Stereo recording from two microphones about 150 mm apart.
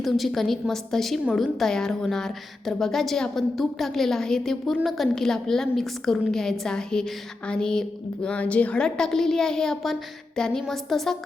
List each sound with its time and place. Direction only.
0.0 s a woman's voice: centre (ahead or behind)